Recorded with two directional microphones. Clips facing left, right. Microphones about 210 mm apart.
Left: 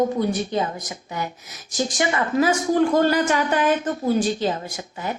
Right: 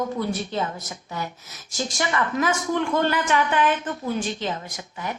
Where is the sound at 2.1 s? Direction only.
30° left (ahead or behind).